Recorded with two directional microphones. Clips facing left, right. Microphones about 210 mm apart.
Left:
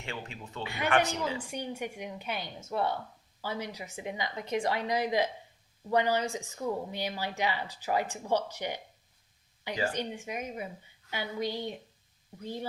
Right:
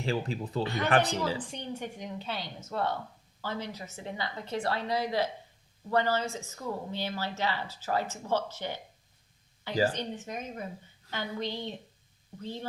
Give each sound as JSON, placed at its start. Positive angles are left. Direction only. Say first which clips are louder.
{"t": 0.0, "sound": "speech", "louder": "right 9 dB", "side_deg": -35}
{"t": 1.4, "sound": "speech", "louder": "left 1 dB", "side_deg": 10}
{"t": 9.9, "sound": "speech", "louder": "left 1 dB", "side_deg": 10}